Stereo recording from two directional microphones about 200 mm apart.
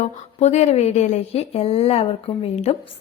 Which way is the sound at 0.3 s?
35° left (ahead or behind).